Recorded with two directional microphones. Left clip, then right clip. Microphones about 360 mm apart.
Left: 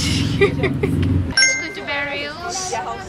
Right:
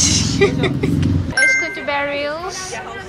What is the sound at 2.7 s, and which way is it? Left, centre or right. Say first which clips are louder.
Speech: left 4 dB; left.